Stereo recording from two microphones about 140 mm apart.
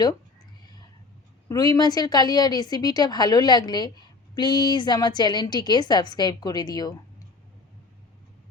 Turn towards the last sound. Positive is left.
turn(degrees=30)  # may be behind; listen again after turning